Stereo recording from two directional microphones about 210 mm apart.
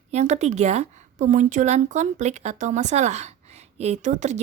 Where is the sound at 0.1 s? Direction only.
35° right (ahead or behind).